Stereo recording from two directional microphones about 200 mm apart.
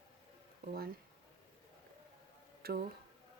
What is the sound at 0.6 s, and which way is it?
Speech, 50° right (ahead or behind).